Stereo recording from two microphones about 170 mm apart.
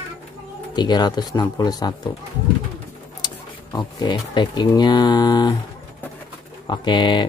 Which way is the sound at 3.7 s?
25° left (ahead or behind).